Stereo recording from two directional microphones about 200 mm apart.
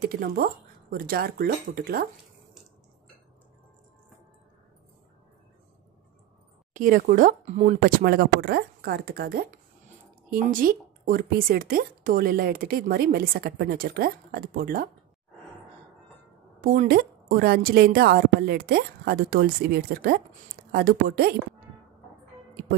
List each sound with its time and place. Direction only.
0.1 s speech: 50° right (ahead or behind)
6.7 s speech: 40° right (ahead or behind)
16.6 s speech: 45° right (ahead or behind)